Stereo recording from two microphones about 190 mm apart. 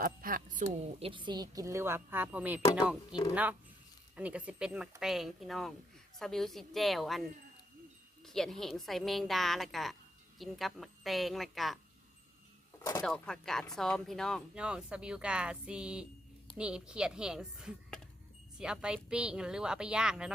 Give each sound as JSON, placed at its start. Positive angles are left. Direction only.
{"t": 0.0, "sound": "a sound", "side_deg": -45}
{"t": 0.6, "sound": "speech", "side_deg": -30}
{"t": 13.0, "sound": "speech", "side_deg": 5}